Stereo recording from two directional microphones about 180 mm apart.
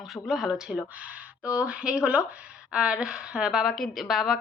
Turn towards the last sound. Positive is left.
turn(degrees=0)  # may be behind; listen again after turning